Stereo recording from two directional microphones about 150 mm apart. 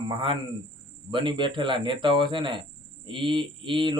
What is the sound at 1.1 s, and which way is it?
Speech, 35° right (ahead or behind).